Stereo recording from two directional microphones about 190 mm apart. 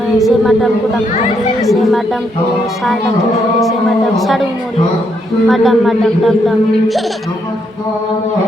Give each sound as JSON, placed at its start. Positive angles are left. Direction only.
{"t": 0.2, "sound": "speech", "side_deg": 0}
{"t": 3.6, "sound": "speech", "side_deg": 0}
{"t": 5.5, "sound": "speech", "side_deg": 0}